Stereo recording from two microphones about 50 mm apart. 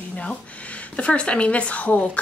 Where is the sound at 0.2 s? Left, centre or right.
Left.